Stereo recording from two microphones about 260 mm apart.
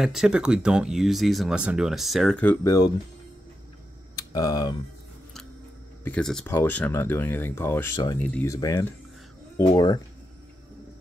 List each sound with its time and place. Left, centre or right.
0.0 s speech: centre
4.1 s typing: centre
6.0 s speech: centre